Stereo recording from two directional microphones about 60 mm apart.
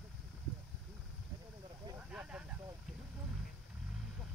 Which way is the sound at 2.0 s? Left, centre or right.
Centre.